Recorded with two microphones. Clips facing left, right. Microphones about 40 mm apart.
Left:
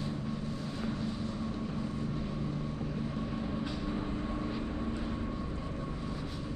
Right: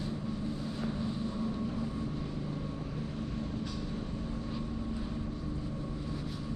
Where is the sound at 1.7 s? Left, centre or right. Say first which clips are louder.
Even; centre.